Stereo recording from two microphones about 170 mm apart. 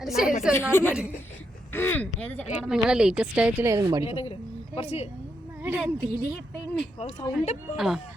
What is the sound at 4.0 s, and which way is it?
Speech, 35° left (ahead or behind).